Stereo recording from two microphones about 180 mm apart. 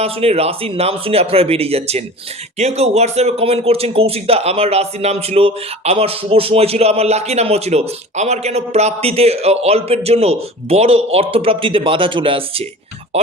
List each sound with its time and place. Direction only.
0.0 s a man's voice: 35° right (ahead or behind)